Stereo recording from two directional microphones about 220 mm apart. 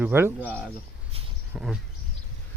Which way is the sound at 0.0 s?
10° right (ahead or behind).